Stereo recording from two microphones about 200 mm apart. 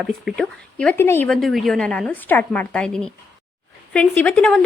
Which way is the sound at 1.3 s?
Centre (ahead or behind).